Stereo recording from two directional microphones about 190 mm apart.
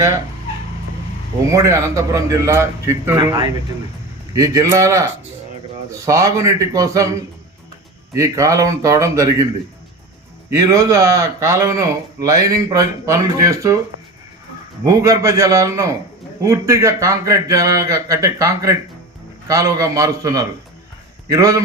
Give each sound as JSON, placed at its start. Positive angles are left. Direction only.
{"t": 1.5, "sound": "speech", "side_deg": -15}
{"t": 10.5, "sound": "speech", "side_deg": -15}
{"t": 14.8, "sound": "speech", "side_deg": -15}